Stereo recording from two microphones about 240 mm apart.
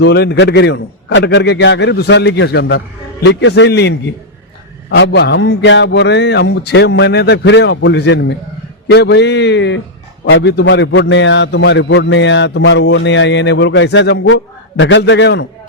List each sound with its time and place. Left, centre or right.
0.0 s a man's voice: left